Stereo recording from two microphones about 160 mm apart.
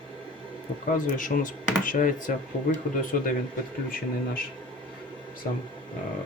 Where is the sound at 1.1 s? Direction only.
55° left (ahead or behind).